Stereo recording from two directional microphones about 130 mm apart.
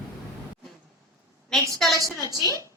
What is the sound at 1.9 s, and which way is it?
Speech, 25° right (ahead or behind).